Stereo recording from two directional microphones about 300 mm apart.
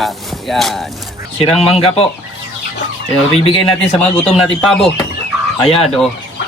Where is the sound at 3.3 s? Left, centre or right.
Centre.